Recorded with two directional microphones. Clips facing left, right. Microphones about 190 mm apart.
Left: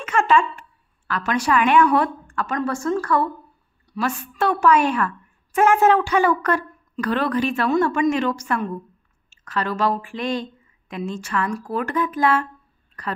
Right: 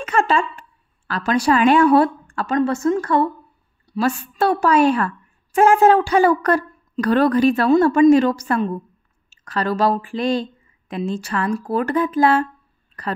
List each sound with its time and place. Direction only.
0.0 s a woman's voice: 35° right (ahead or behind)